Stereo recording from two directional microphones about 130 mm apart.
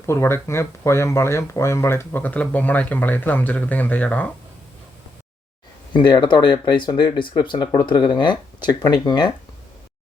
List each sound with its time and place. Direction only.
0.0 s speech: 20° left (ahead or behind)
5.9 s speech: 35° left (ahead or behind)